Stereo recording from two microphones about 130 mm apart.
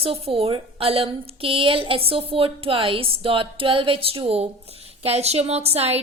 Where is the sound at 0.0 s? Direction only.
50° right (ahead or behind).